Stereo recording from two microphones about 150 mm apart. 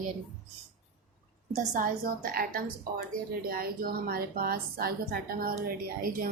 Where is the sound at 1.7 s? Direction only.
70° right (ahead or behind).